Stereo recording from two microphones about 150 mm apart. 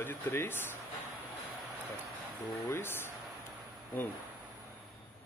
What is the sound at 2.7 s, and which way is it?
Speech, 15° left (ahead or behind).